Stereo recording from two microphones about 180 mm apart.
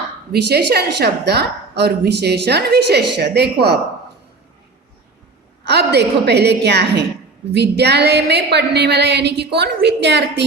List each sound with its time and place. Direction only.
0.3 s a woman's voice: 65° right (ahead or behind)
5.6 s a woman's voice: 65° right (ahead or behind)